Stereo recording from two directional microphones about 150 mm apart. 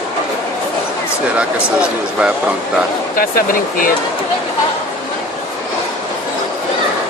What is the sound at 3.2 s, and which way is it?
Speech, 70° left (ahead or behind).